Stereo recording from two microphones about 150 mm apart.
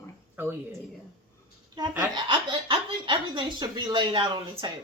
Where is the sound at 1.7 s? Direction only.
25° right (ahead or behind).